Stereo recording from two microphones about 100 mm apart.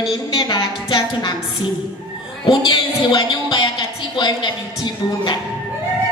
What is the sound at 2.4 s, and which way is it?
A woman's voice, 50° left (ahead or behind).